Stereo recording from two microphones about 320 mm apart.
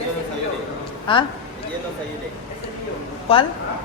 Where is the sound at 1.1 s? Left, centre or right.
Centre.